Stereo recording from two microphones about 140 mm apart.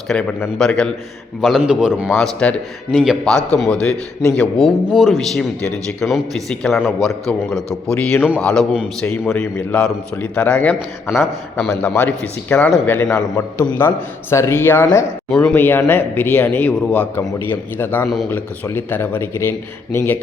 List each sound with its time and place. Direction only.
0.1 s a man's voice: 5° left (ahead or behind)
2.2 s a man's voice: 5° left (ahead or behind)
7.9 s a man's voice: 10° left (ahead or behind)
9.0 s a man's voice: 15° left (ahead or behind)
11.1 s a man's voice: centre (ahead or behind)
11.8 s a man's voice: 10° left (ahead or behind)
15.3 s a man's voice: 5° left (ahead or behind)
15.5 s a man's voice: 15° left (ahead or behind)